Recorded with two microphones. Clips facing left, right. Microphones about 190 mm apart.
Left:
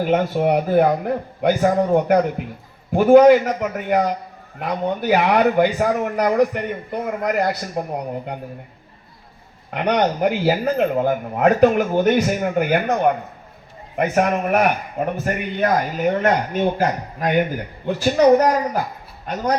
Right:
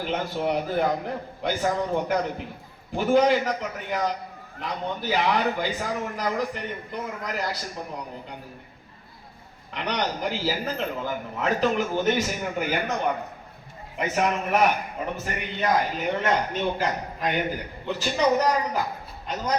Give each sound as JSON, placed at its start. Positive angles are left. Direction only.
{"t": 0.0, "sound": "speech", "side_deg": 55}
{"t": 2.9, "sound": "a man's voice", "side_deg": 50}
{"t": 9.7, "sound": "speech", "side_deg": 55}
{"t": 13.9, "sound": "a man's voice", "side_deg": 55}